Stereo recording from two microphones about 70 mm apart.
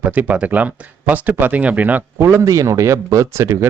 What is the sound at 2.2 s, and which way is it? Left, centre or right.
Speech, right.